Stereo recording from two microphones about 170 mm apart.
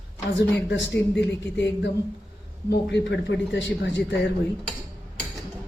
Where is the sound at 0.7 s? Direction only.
90° left.